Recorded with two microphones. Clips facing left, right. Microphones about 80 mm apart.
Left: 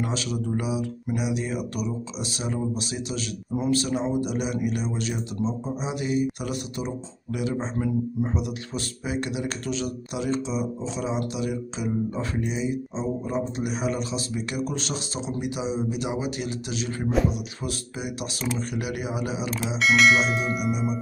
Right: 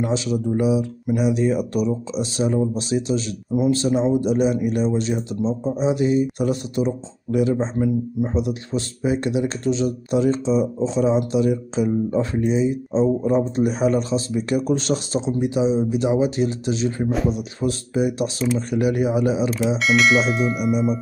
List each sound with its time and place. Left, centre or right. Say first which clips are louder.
0.0 s speech: right 6 dB; right
7.8 s speech: right 5 dB; right
19.8 s bell: even; centre